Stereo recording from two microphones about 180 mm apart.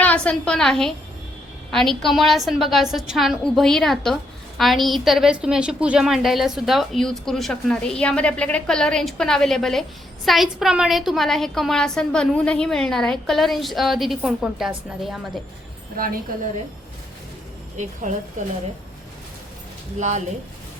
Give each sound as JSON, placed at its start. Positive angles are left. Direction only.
{"t": 0.0, "sound": "a woman's voice", "side_deg": 5}
{"t": 16.0, "sound": "speech", "side_deg": -50}
{"t": 17.7, "sound": "speech", "side_deg": -40}
{"t": 20.0, "sound": "speech", "side_deg": -40}